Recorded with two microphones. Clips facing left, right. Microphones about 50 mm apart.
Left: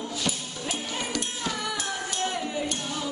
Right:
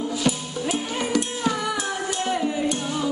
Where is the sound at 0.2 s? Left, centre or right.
Centre.